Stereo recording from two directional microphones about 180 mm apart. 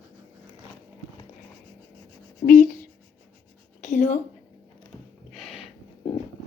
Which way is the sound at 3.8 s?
45° left (ahead or behind).